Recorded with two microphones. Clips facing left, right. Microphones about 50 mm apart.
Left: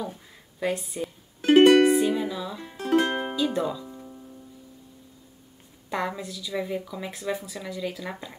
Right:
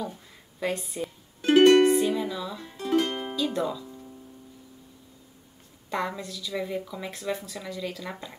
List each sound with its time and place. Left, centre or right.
0.6 s a woman's voice: centre
1.4 s music: centre
1.8 s music: centre
2.8 s music: left
3.3 s speech: centre
3.8 s music: centre
5.9 s a woman's voice: centre